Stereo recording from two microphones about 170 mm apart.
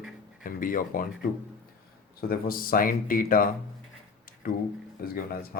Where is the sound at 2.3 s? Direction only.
60° left (ahead or behind).